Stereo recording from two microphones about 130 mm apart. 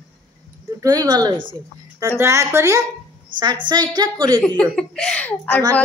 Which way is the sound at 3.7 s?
30° right (ahead or behind).